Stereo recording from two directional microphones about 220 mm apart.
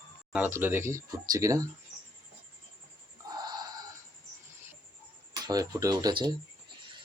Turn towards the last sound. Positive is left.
turn(degrees=-20)  # may be behind; listen again after turning